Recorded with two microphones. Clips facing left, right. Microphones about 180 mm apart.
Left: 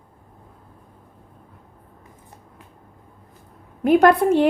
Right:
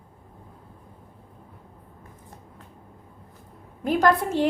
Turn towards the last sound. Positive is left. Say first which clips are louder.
# left 6 dB
turn(degrees=60)  # may be behind; listen again after turning